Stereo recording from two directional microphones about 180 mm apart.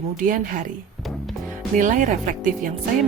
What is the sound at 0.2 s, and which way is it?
Speech, 50° right (ahead or behind).